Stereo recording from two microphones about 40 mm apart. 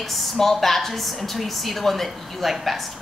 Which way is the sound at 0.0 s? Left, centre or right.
Centre.